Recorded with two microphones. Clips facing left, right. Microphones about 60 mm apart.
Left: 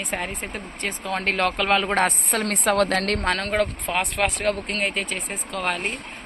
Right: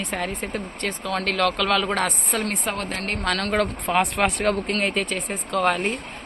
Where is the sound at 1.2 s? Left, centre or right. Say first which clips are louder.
Even; left.